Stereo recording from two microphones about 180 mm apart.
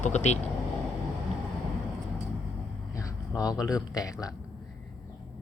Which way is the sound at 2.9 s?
15° left (ahead or behind).